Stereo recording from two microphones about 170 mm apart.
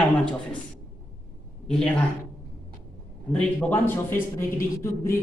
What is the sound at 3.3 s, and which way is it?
A man's voice, 15° left (ahead or behind).